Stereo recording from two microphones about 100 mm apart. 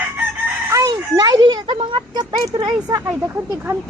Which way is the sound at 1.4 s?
50° right (ahead or behind).